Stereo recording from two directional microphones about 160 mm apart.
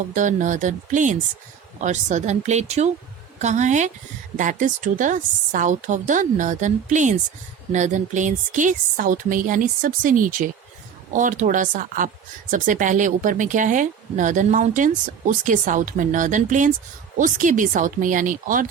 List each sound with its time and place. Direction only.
0.1 s speech: 50° right (ahead or behind)